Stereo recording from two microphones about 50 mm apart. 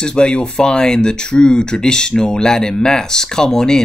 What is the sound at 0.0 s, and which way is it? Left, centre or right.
Speech, centre.